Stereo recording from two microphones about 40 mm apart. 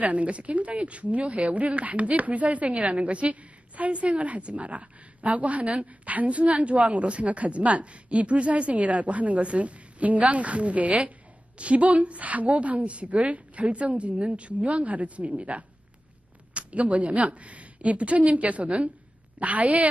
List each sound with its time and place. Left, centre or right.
0.0 s a woman's voice: right